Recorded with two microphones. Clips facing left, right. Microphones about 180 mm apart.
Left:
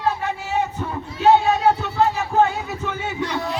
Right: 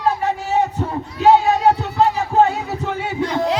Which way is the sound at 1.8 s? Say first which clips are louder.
Right 3 dB; 30° right (ahead or behind).